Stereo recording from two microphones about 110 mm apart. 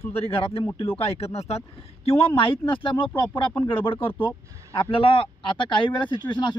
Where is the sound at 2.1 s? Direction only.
55° left (ahead or behind).